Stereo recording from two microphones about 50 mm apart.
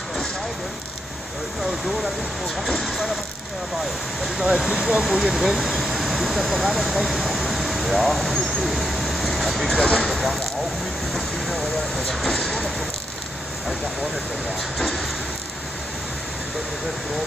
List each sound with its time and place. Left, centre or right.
2.8 s vehicle: centre
4.2 s speech: centre
9.8 s speech: left
10.0 s vehicle: centre
11.1 s speech: centre
12.4 s a sound: centre